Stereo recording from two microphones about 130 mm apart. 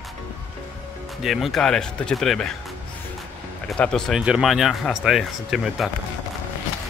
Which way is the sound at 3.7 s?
5° left (ahead or behind).